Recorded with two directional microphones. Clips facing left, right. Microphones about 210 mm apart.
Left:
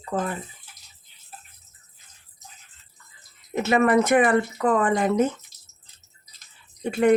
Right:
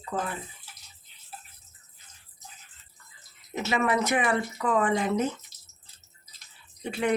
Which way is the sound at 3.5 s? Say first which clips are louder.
Left 7 dB; 55° left (ahead or behind).